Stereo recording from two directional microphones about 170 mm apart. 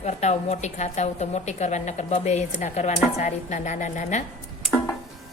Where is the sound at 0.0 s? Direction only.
40° left (ahead or behind).